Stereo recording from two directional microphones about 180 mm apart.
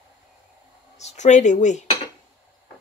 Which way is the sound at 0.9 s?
40° left (ahead or behind).